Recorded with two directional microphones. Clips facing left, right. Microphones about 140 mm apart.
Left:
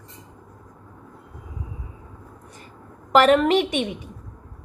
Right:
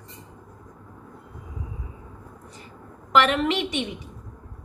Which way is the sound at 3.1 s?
40° left (ahead or behind).